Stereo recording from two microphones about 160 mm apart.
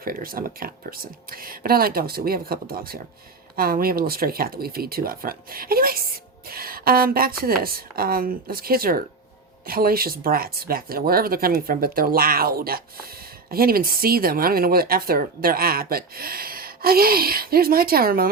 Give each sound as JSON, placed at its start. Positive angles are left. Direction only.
{"t": 0.0, "sound": "speech", "side_deg": -65}